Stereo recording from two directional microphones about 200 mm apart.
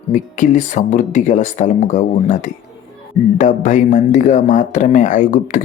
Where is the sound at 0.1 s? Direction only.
40° left (ahead or behind).